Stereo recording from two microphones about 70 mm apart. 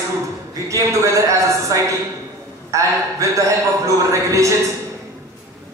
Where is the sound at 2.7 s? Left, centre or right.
Right.